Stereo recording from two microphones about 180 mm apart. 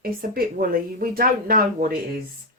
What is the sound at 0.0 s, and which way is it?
Speech, 55° right (ahead or behind).